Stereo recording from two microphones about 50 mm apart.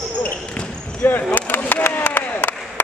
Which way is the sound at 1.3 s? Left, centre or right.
Left.